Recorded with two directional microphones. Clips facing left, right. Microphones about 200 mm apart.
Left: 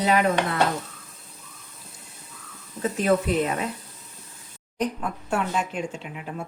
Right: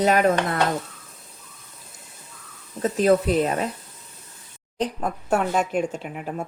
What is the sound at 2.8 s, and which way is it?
Speech, 35° right (ahead or behind).